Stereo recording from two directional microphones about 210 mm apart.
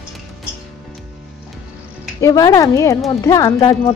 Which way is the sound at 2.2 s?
15° left (ahead or behind).